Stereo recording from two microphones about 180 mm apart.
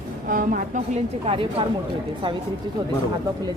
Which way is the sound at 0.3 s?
50° right (ahead or behind).